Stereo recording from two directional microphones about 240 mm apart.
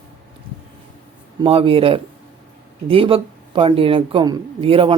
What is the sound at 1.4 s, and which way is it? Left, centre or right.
Speech, right.